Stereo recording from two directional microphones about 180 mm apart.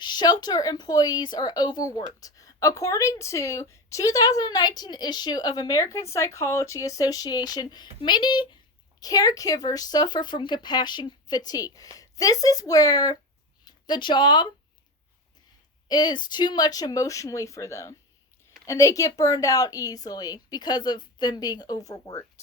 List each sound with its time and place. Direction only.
0.0 s a woman's voice: 25° left (ahead or behind)
15.9 s a woman's voice: 25° left (ahead or behind)